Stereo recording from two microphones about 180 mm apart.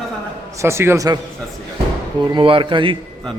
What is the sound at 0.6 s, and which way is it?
Speech, 15° right (ahead or behind).